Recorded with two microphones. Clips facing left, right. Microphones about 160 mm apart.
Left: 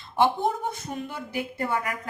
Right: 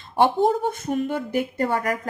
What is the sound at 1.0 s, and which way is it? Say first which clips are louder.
A woman's voice: right 8 dB; 45° right (ahead or behind).